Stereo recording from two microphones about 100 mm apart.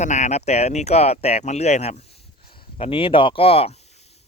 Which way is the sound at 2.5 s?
60° left (ahead or behind).